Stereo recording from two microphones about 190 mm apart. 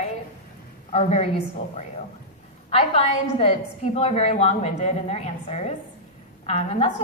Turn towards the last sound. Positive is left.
turn(degrees=30)  # may be behind; listen again after turning